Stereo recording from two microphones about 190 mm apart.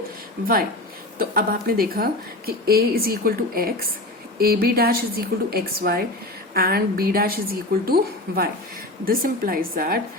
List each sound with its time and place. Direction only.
1.2 s a woman's voice: 50° right (ahead or behind)